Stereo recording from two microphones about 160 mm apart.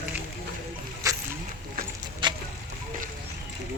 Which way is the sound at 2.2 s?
30° right (ahead or behind).